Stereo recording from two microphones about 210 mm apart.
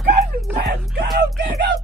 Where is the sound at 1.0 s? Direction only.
50° right (ahead or behind).